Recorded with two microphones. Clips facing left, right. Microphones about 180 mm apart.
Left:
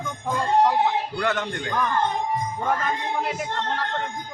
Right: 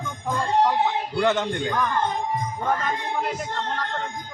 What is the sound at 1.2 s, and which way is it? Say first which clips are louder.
Speech: right 5 dB; 25° right (ahead or behind).